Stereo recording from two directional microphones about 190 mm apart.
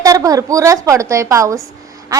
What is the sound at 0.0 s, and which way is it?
A woman's voice, 20° right (ahead or behind).